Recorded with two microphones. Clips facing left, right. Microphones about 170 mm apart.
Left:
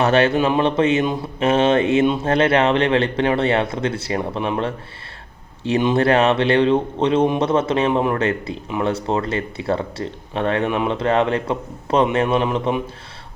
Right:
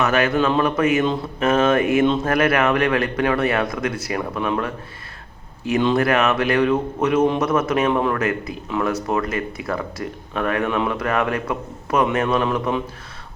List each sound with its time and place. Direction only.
0.0 s speech: 30° left (ahead or behind)
5.8 s speech: 25° left (ahead or behind)